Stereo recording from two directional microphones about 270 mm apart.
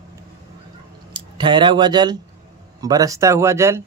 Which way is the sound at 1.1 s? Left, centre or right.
Centre.